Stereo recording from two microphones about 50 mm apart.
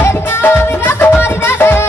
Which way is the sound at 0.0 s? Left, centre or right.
Left.